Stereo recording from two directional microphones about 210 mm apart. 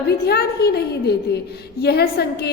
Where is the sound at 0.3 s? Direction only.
50° left (ahead or behind).